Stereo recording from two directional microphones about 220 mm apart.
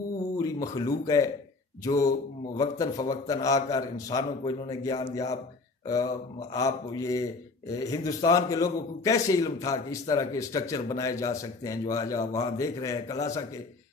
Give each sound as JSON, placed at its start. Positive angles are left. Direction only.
{"t": 0.4, "sound": "a man's voice", "side_deg": 15}